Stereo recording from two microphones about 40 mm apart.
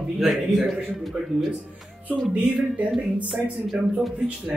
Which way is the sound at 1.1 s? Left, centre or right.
Right.